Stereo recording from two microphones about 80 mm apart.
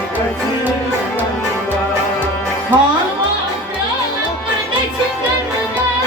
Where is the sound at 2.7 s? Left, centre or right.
Right.